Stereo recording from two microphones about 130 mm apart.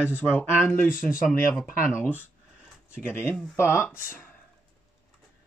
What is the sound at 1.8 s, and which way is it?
Speech, 15° left (ahead or behind).